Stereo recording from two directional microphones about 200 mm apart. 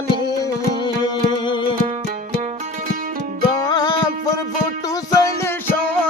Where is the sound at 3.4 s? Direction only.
20° left (ahead or behind).